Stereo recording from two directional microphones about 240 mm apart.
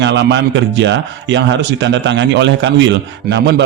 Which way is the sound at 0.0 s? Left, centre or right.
Right.